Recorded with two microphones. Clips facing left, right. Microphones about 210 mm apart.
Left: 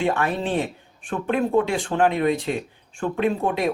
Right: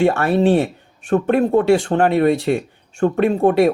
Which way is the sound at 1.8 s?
45° right (ahead or behind).